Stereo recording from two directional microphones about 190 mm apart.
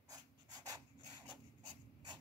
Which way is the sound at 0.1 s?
20° right (ahead or behind).